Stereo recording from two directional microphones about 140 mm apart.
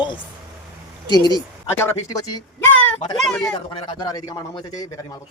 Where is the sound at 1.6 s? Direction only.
15° left (ahead or behind).